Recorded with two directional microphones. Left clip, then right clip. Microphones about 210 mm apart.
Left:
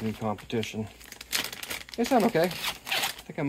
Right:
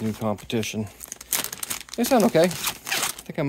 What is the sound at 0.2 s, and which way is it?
Speech, 60° right (ahead or behind).